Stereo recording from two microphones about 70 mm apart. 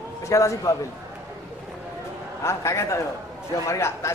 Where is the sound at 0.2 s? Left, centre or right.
Left.